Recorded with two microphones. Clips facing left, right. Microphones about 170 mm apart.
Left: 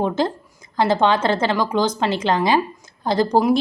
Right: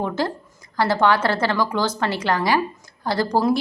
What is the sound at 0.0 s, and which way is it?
A woman's voice, 20° left (ahead or behind).